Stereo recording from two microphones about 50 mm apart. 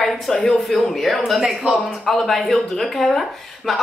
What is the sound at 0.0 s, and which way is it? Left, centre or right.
Speech, centre.